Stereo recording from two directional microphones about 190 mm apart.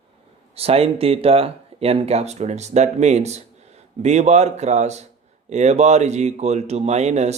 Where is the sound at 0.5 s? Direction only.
30° right (ahead or behind).